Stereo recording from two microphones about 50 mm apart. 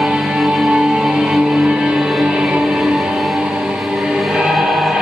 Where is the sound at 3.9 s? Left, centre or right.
Centre.